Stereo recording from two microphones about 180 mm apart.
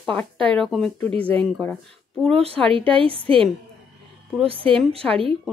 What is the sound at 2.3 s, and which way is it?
A woman's voice, 35° right (ahead or behind).